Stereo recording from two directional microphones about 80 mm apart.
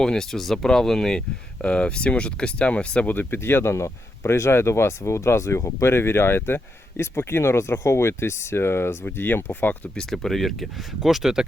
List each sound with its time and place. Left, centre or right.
0.0 s speech: centre
9.9 s speech: centre